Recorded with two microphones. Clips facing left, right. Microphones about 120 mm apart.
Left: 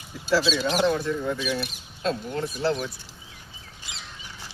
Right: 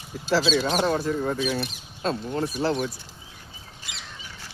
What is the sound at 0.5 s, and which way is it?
Speech, 45° right (ahead or behind).